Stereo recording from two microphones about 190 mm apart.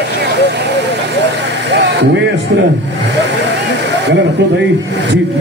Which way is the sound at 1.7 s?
65° right (ahead or behind).